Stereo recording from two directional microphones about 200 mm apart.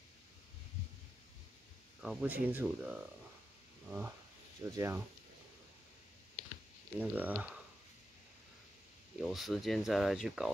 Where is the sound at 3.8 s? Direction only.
10° right (ahead or behind).